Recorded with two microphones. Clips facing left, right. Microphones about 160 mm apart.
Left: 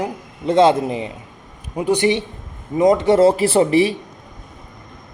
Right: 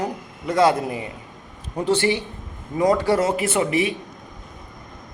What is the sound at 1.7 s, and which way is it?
Speech, 15° left (ahead or behind).